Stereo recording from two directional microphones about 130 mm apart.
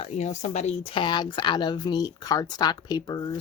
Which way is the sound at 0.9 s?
35° left (ahead or behind).